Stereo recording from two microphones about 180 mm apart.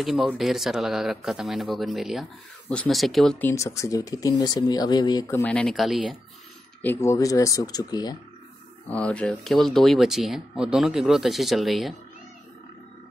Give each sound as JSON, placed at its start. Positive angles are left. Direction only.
{"t": 0.0, "sound": "speech", "side_deg": 0}
{"t": 5.4, "sound": "speech", "side_deg": 5}
{"t": 6.8, "sound": "speech", "side_deg": 15}
{"t": 8.8, "sound": "speech", "side_deg": 5}